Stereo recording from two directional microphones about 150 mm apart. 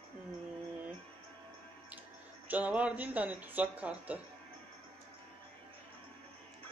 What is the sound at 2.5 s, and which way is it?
Speech, 10° right (ahead or behind).